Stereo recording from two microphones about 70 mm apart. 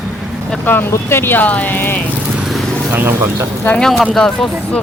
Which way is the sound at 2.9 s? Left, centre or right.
Right.